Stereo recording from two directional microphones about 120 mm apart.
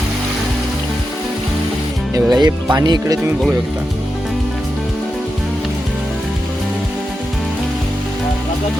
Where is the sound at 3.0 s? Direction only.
25° right (ahead or behind).